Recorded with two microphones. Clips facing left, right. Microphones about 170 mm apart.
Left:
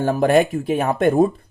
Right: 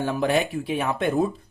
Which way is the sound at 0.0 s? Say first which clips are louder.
Left 7 dB; 45° left (ahead or behind).